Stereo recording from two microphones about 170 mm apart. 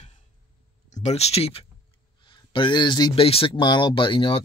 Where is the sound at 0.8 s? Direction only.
45° left (ahead or behind).